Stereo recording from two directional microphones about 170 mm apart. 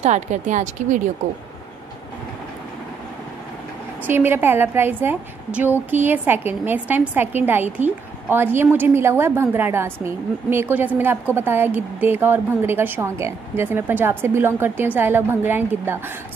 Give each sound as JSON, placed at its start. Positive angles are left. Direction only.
{"t": 0.0, "sound": "a woman's voice", "side_deg": -45}
{"t": 4.1, "sound": "a woman's voice", "side_deg": -15}